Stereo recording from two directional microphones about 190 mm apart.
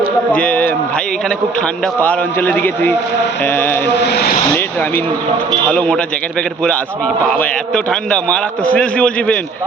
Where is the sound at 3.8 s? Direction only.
60° left (ahead or behind).